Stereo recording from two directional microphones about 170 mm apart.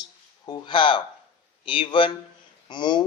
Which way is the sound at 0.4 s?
25° left (ahead or behind).